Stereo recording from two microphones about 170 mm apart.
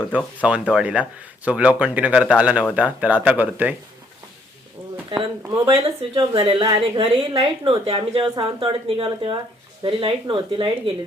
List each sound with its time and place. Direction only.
0.1 s speech: 10° right (ahead or behind)
5.5 s speech: 30° right (ahead or behind)